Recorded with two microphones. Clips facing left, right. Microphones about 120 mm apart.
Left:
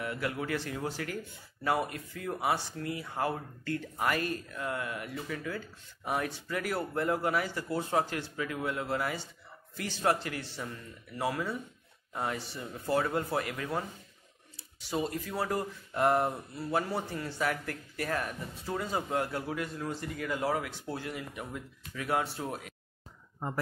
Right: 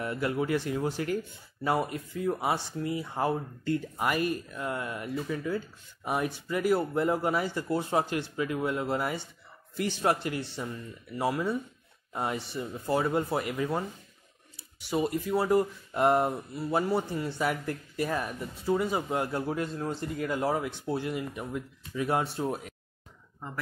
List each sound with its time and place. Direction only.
0.0 s speech: 30° right (ahead or behind)
14.9 s speech: 15° right (ahead or behind)
19.4 s speech: 30° right (ahead or behind)